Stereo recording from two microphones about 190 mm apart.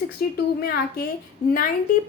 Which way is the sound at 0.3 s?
55° left (ahead or behind).